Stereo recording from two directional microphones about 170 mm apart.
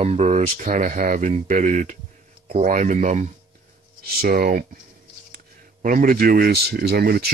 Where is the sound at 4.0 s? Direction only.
60° right (ahead or behind).